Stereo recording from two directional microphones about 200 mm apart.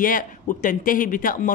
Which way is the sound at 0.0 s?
40° left (ahead or behind).